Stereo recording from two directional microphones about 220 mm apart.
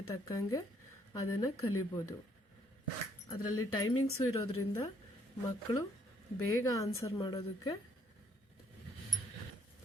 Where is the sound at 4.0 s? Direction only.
75° left (ahead or behind).